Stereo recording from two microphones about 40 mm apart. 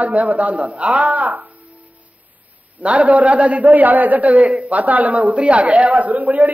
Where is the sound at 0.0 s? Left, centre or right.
Right.